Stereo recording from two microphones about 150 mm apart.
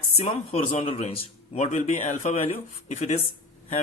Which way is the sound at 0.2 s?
45° left (ahead or behind).